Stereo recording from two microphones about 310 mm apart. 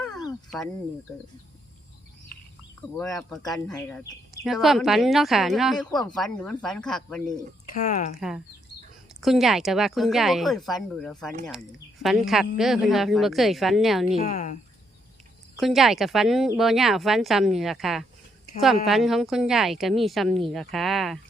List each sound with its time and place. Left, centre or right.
2.9 s a woman's voice: centre
7.7 s speech: left
9.2 s a woman's voice: centre
14.2 s speech: left
15.6 s a woman's voice: centre